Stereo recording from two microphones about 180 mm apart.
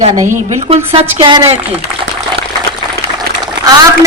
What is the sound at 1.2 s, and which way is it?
Speech, 25° right (ahead or behind).